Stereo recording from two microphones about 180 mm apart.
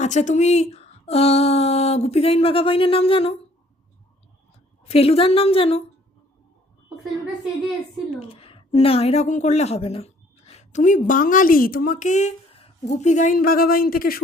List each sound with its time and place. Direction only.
0.0 s speech: 40° left (ahead or behind)
4.9 s speech: 35° left (ahead or behind)
8.3 s a woman's voice: 30° left (ahead or behind); by 14.2 s 55° left (ahead or behind)